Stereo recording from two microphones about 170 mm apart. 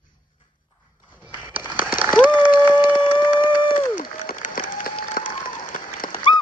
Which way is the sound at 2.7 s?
5° right (ahead or behind).